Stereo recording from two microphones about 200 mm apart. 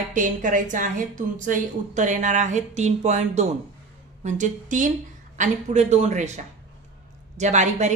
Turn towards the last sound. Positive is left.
turn(degrees=-35)  # may be behind; listen again after turning